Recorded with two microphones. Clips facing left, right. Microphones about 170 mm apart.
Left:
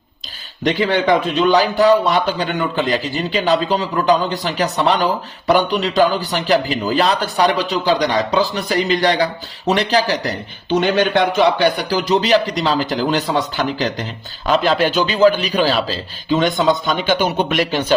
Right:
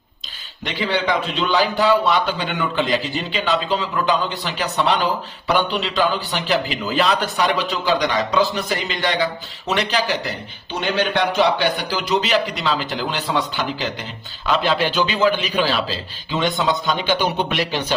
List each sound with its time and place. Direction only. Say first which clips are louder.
0.6 s a man's voice: left 6 dB; 45° left (ahead or behind)
10.7 s a man's voice: left 6 dB; 50° left (ahead or behind)
17.1 s speech: left 4 dB; 45° left (ahead or behind)